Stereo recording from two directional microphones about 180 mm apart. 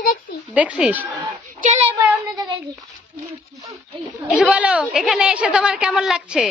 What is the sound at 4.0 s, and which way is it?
A woman's voice, 5° right (ahead or behind).